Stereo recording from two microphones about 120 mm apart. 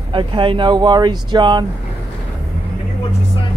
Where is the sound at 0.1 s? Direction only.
45° right (ahead or behind).